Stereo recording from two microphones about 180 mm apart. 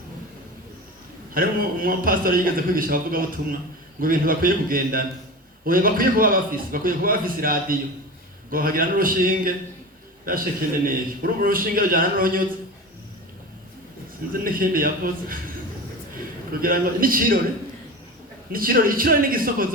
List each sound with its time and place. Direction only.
1.3 s a man's voice: 50° right (ahead or behind)
14.4 s a man's voice: 50° right (ahead or behind)
16.5 s a man's voice: 55° right (ahead or behind)
18.5 s a man's voice: 50° right (ahead or behind)